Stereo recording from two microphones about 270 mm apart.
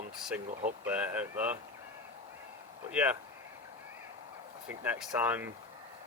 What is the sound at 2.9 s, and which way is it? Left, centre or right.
Speech, centre.